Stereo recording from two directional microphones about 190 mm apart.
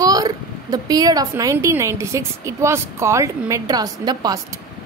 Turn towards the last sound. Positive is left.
turn(degrees=-20)  # may be behind; listen again after turning